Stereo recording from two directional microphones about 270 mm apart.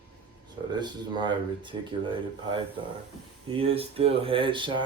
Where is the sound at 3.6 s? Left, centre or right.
Right.